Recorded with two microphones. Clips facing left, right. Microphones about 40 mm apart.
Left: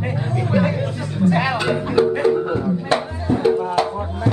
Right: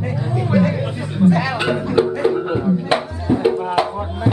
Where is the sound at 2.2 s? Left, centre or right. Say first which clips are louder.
Even; centre.